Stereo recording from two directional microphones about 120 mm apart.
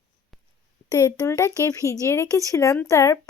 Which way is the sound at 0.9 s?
25° left (ahead or behind).